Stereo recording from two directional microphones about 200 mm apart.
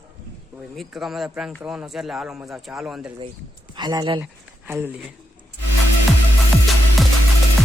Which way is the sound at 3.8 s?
20° right (ahead or behind).